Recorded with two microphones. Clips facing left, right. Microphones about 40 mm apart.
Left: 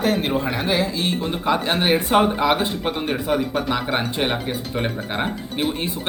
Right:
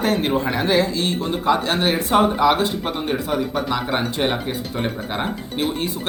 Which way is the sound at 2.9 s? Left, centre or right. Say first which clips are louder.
Left 1 dB; centre.